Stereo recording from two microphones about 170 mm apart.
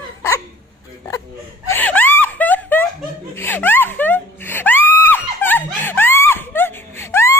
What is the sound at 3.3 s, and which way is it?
Screaming, 10° left (ahead or behind).